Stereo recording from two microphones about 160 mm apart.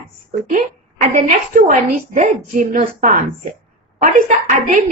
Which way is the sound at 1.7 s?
50° right (ahead or behind).